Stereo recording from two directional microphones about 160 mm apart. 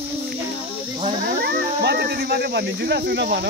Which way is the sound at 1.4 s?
90° right.